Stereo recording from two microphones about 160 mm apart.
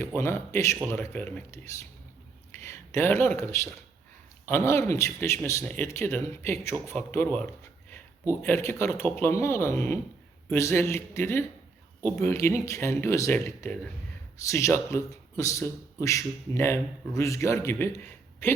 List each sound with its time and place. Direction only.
0.0 s a man's voice: 15° left (ahead or behind)